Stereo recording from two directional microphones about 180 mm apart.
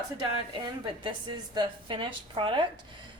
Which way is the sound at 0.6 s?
20° right (ahead or behind).